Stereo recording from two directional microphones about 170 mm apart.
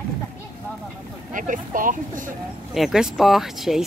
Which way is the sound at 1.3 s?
50° right (ahead or behind).